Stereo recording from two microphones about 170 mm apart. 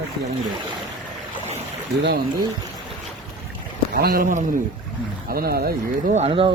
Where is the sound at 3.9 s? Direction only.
60° right (ahead or behind).